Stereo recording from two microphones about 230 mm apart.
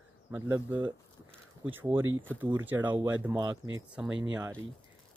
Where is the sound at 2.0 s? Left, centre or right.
Right.